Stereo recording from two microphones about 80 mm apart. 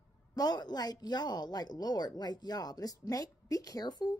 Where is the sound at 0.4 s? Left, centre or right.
Left.